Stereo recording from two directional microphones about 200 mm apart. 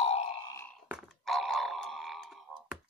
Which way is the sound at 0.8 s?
5° right (ahead or behind).